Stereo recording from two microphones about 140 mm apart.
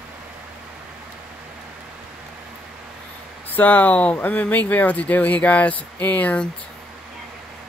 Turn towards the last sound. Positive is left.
turn(degrees=10)  # may be behind; listen again after turning